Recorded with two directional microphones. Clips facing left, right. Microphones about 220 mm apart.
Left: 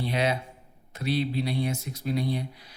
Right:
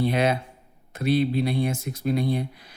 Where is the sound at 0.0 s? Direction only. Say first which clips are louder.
Right 5 dB; 50° right (ahead or behind).